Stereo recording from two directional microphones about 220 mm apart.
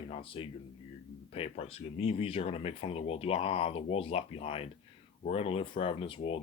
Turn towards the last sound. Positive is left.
turn(degrees=25)  # may be behind; listen again after turning